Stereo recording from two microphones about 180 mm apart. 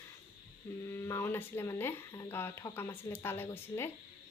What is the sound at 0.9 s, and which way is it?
Speech, 15° left (ahead or behind).